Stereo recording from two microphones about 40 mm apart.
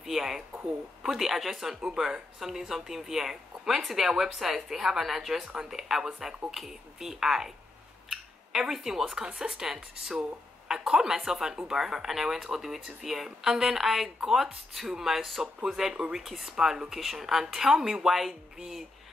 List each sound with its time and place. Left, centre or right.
0.0 s a sound: centre
1.1 s speech: centre
9.2 s speech: right
9.5 s speech: centre